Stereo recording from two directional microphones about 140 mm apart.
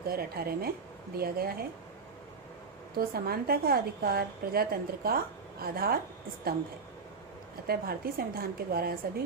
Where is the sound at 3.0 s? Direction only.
90° right.